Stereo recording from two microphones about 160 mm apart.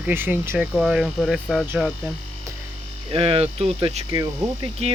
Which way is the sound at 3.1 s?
35° right (ahead or behind).